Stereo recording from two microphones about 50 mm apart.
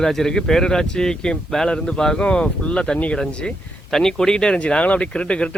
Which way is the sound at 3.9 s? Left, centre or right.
Centre.